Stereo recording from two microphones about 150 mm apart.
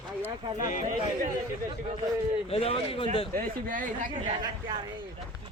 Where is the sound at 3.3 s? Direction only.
65° right (ahead or behind).